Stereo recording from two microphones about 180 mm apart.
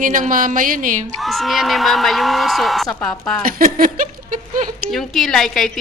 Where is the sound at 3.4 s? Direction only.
50° right (ahead or behind).